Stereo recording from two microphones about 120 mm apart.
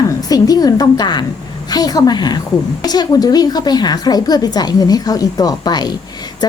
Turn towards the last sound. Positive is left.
turn(degrees=35)  # may be behind; listen again after turning